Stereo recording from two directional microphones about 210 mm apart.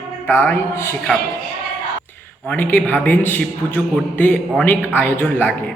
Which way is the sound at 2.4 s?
10° left (ahead or behind).